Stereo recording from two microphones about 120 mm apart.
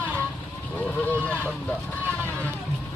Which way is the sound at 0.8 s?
10° left (ahead or behind).